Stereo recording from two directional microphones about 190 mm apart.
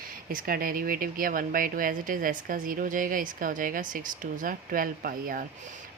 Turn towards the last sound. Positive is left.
turn(degrees=-50)  # may be behind; listen again after turning